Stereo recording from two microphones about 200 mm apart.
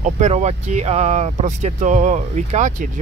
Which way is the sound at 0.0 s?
35° right (ahead or behind).